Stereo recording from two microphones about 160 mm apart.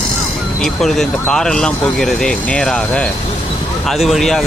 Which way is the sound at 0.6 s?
5° left (ahead or behind).